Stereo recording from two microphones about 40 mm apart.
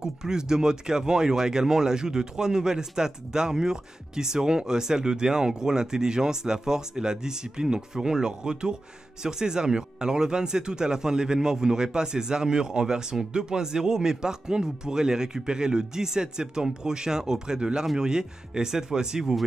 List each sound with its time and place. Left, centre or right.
0.0 s speech: centre